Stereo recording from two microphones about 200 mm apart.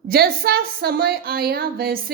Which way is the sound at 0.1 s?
50° right (ahead or behind).